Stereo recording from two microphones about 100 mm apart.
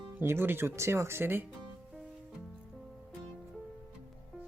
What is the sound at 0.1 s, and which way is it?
Speech, 20° right (ahead or behind).